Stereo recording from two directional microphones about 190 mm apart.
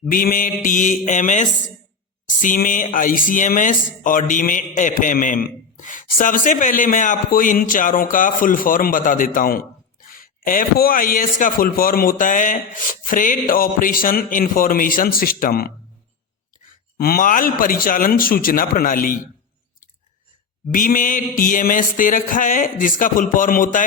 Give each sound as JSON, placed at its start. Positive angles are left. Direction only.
{"t": 0.1, "sound": "a man's voice", "side_deg": 45}
{"t": 17.0, "sound": "a man's voice", "side_deg": 50}
{"t": 20.7, "sound": "a man's voice", "side_deg": 45}